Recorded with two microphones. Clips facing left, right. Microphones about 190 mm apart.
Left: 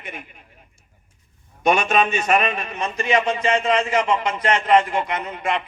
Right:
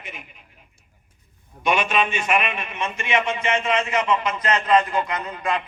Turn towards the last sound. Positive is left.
turn(degrees=25)  # may be behind; listen again after turning